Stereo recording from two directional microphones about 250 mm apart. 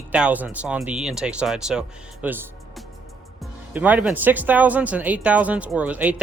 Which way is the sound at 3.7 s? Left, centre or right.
Centre.